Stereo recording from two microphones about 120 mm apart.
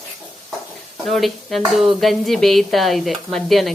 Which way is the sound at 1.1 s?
Centre (ahead or behind).